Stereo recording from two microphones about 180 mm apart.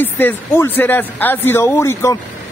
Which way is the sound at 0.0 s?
10° left (ahead or behind).